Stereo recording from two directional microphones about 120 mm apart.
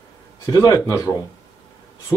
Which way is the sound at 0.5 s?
30° left (ahead or behind).